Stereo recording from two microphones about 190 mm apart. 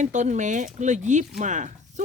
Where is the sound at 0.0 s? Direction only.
40° right (ahead or behind).